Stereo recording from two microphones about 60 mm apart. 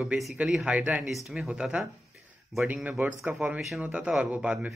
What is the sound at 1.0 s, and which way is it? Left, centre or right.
Speech, centre.